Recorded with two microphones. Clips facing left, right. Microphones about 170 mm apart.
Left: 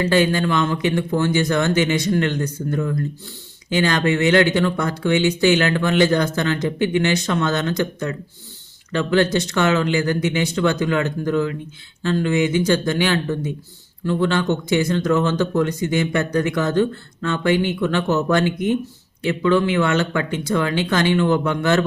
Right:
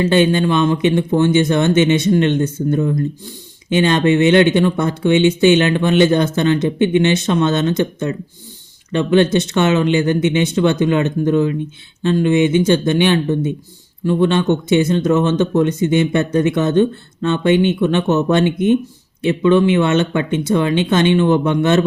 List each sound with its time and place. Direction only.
0.0 s speech: 20° right (ahead or behind)